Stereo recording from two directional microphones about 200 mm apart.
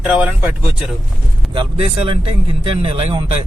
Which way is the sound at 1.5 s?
25° right (ahead or behind).